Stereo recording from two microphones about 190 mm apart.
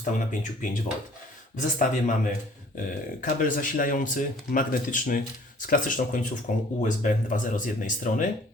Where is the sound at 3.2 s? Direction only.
45° left (ahead or behind).